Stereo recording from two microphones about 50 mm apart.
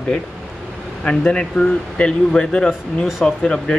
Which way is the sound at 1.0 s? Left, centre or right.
Left.